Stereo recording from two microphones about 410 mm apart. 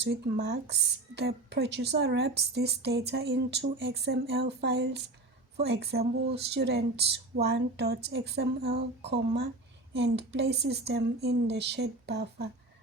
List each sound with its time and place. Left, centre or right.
0.0 s a woman's voice: right